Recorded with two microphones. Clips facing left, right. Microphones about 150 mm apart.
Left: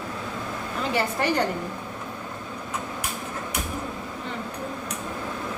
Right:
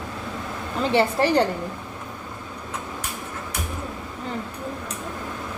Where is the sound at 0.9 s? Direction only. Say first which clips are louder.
Right 5 dB; 30° right (ahead or behind).